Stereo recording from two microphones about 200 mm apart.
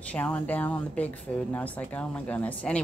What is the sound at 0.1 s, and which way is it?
A woman's voice, 10° left (ahead or behind).